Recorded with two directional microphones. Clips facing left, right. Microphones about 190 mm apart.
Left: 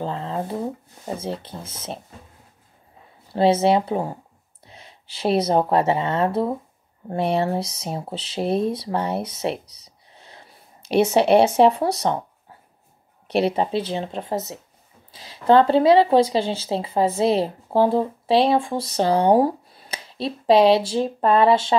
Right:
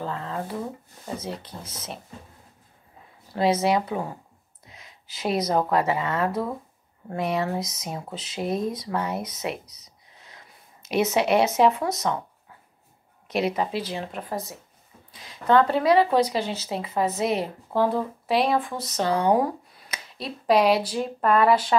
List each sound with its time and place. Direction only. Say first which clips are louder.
0.0 s a woman's voice: left 4 dB; 30° left (ahead or behind)
3.3 s a woman's voice: left 4 dB; 30° left (ahead or behind)